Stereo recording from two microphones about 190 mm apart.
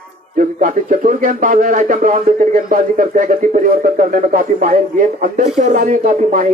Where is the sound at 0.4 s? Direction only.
45° right (ahead or behind).